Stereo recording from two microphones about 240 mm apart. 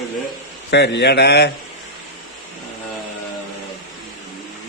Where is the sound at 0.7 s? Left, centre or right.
Left.